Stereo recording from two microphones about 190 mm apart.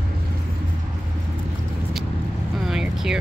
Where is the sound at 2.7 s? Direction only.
5° right (ahead or behind).